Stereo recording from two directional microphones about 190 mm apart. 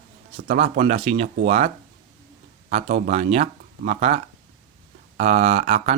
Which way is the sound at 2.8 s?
45° right (ahead or behind).